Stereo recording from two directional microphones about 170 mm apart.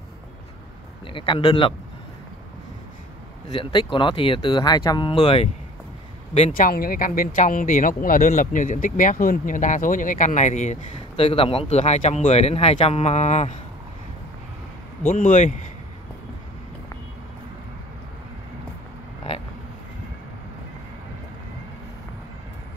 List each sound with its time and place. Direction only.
1.0 s speech: 30° left (ahead or behind)
3.4 s speech: 25° left (ahead or behind)
6.5 s speech: 60° left (ahead or behind); by 13.5 s 40° left (ahead or behind)
15.0 s speech: 50° left (ahead or behind)